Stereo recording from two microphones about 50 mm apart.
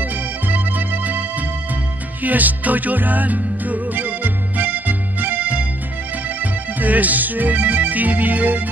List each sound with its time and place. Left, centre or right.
0.0 s music: right
2.2 s music: right